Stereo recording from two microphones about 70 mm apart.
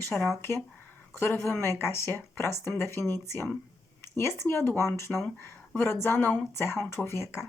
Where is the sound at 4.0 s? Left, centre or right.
Left.